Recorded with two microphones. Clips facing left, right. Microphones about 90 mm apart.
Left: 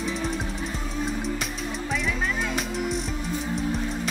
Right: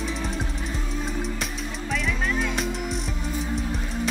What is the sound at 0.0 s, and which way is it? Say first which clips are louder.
Music: left 1 dB; centre (ahead or behind).